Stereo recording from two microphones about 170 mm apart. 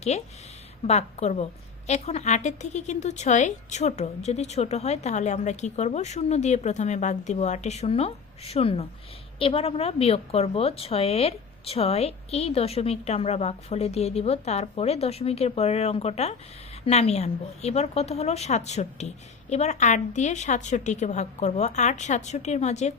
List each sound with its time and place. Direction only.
0.9 s speech: 40° left (ahead or behind)